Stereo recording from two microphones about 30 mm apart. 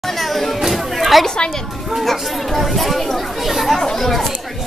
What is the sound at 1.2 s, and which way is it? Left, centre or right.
Speech, left.